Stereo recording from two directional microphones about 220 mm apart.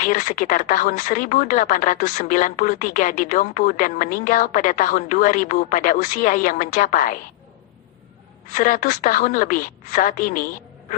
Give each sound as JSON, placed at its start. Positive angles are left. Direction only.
{"t": 0.0, "sound": "speech", "side_deg": 35}
{"t": 8.5, "sound": "speech", "side_deg": 35}